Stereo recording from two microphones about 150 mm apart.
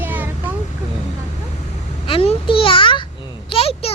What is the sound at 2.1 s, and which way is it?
A child's voice, 35° left (ahead or behind).